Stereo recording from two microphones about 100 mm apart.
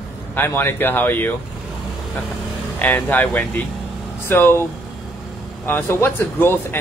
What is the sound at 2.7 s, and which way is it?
Speech, 15° left (ahead or behind).